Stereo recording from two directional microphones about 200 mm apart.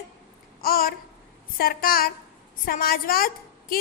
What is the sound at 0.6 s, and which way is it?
Babbling, 45° left (ahead or behind).